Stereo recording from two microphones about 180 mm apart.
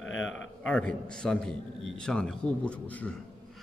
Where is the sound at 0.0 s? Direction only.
90° left.